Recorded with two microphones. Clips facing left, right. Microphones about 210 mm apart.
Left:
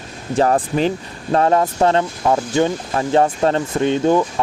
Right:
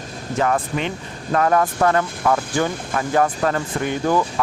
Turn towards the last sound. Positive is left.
turn(degrees=25)  # may be behind; listen again after turning